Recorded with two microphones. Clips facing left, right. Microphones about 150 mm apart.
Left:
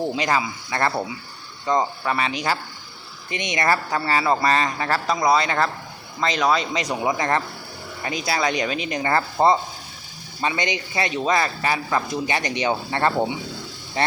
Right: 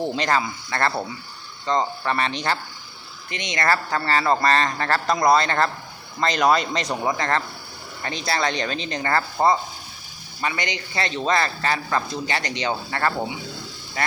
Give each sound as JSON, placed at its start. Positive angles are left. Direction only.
{"t": 0.0, "sound": "speech", "side_deg": 5}
{"t": 3.2, "sound": "speech", "side_deg": 20}
{"t": 6.8, "sound": "speech", "side_deg": 10}